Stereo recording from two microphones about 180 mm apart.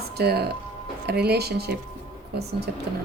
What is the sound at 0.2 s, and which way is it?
Speech, 65° right (ahead or behind).